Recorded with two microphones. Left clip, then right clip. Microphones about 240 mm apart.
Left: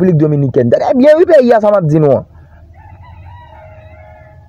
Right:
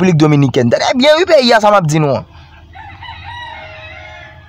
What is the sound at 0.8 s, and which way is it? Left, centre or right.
Speech, centre.